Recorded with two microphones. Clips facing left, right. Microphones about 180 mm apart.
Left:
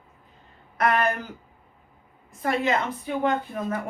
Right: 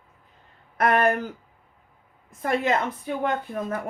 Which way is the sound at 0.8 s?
50° right (ahead or behind).